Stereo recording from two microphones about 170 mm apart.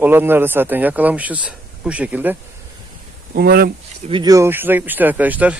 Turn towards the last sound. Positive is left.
turn(degrees=-10)  # may be behind; listen again after turning